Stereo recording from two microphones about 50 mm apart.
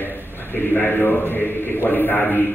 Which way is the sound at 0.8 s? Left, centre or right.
Left.